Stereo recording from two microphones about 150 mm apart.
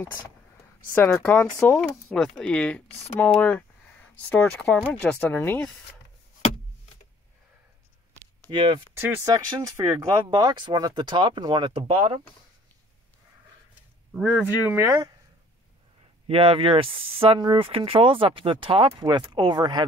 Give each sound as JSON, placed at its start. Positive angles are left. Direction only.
{"t": 0.9, "sound": "speech", "side_deg": 10}
{"t": 8.5, "sound": "speech", "side_deg": -35}
{"t": 8.9, "sound": "speech", "side_deg": -15}
{"t": 14.7, "sound": "speech", "side_deg": -20}
{"t": 16.3, "sound": "speech", "side_deg": -35}